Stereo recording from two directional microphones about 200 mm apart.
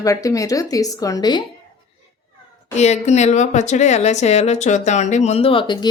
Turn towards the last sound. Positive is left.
turn(degrees=25)  # may be behind; listen again after turning